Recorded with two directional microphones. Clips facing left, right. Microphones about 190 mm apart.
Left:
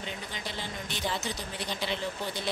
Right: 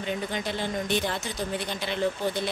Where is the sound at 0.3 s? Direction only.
55° right (ahead or behind).